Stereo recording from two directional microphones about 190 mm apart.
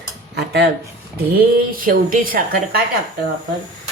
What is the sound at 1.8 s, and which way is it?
Speech, 50° right (ahead or behind).